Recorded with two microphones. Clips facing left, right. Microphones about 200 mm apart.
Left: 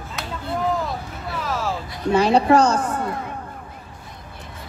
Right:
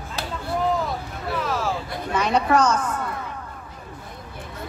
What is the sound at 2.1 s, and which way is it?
A woman's voice, 30° left (ahead or behind).